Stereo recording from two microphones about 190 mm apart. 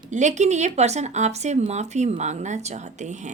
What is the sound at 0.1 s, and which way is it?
Speech, 40° right (ahead or behind).